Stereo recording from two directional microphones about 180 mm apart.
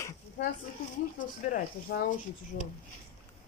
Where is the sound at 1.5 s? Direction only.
55° left (ahead or behind).